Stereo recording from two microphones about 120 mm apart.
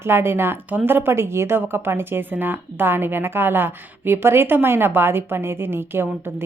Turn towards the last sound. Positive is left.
turn(degrees=-20)  # may be behind; listen again after turning